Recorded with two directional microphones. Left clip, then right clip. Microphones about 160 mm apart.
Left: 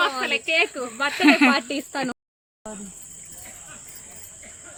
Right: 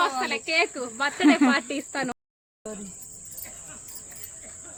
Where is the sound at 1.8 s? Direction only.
45° left (ahead or behind).